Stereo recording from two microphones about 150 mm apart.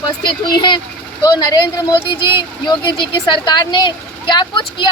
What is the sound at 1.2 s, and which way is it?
Speech, 25° left (ahead or behind).